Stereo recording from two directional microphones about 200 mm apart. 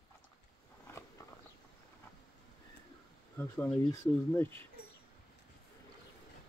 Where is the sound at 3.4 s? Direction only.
10° left (ahead or behind).